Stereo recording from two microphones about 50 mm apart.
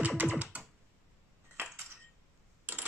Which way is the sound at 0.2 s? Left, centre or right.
Right.